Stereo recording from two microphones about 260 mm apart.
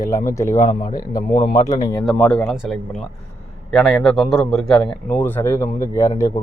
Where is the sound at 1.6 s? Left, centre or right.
Centre.